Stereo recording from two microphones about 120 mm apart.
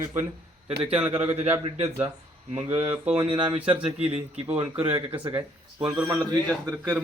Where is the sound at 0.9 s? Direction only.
15° right (ahead or behind).